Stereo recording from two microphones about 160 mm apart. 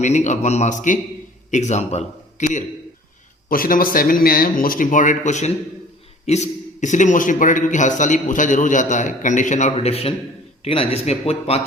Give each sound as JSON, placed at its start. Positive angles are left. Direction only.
{"t": 0.0, "sound": "a man's voice", "side_deg": 50}
{"t": 3.5, "sound": "a man's voice", "side_deg": 60}